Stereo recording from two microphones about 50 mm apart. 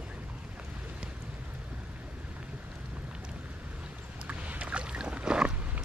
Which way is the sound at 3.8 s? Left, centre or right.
Right.